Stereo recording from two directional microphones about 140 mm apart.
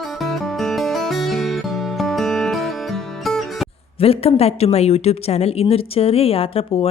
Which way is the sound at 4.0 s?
45° left (ahead or behind).